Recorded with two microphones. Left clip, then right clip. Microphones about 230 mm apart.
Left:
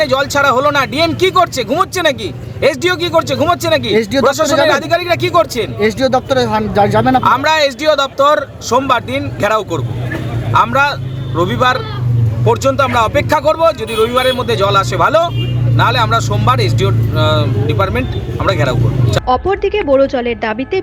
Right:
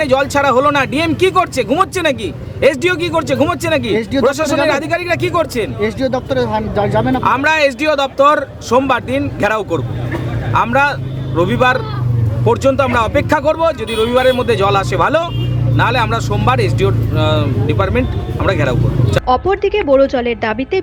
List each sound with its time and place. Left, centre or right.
0.0 s speech: centre
5.8 s speech: left
7.2 s speech: centre